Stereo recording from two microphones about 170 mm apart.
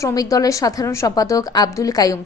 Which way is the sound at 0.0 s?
20° left (ahead or behind).